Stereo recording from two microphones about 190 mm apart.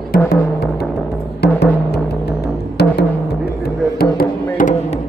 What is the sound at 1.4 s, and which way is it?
Music, 60° left (ahead or behind).